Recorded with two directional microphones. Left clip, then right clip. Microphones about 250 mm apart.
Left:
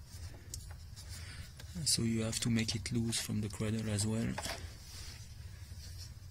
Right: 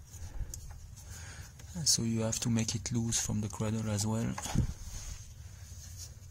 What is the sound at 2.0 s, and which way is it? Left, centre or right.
Speech, centre.